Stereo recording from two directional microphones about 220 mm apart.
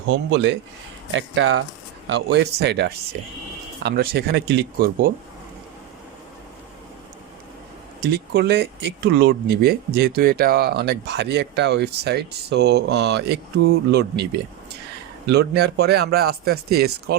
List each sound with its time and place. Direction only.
0.1 s speech: 55° right (ahead or behind)
1.1 s speech: 65° right (ahead or behind)
2.3 s speech: 50° right (ahead or behind)
8.0 s speech: 45° right (ahead or behind)